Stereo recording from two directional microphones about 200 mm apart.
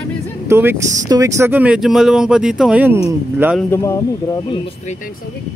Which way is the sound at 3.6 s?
15° left (ahead or behind).